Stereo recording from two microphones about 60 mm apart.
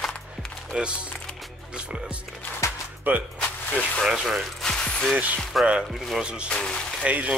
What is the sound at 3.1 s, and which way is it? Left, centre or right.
Speech, right.